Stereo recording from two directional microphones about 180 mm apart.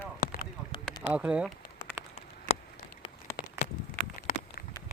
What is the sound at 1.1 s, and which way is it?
Speech, 5° right (ahead or behind).